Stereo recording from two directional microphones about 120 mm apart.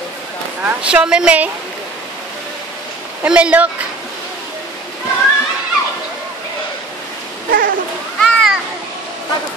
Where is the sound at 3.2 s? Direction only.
10° right (ahead or behind).